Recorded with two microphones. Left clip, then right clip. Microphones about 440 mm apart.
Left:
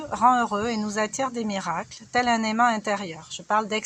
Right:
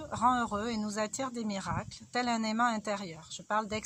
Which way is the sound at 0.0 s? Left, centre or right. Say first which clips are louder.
Left 9 dB; left.